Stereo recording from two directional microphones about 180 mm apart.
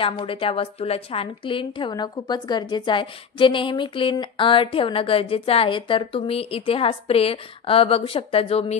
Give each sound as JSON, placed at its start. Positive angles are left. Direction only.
{"t": 0.0, "sound": "a woman's voice", "side_deg": 30}